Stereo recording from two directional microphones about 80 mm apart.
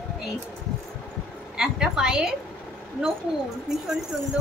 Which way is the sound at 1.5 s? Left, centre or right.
Centre.